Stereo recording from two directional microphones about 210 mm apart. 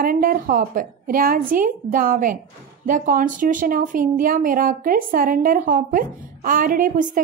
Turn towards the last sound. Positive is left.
turn(degrees=-40)  # may be behind; listen again after turning